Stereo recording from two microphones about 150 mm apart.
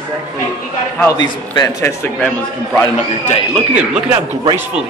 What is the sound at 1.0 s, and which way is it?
A man's voice, 25° left (ahead or behind).